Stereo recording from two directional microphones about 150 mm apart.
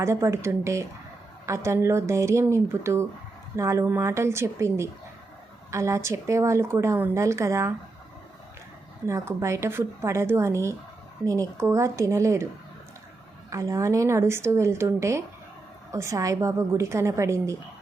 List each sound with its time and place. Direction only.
0.0 s speech: 20° right (ahead or behind)
9.0 s speech: 20° right (ahead or behind)
13.5 s speech: 20° right (ahead or behind)